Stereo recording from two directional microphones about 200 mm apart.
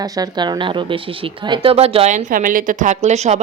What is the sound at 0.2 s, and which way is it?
A woman's voice, 20° right (ahead or behind).